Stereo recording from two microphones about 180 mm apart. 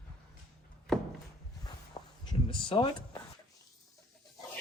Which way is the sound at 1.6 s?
25° left (ahead or behind).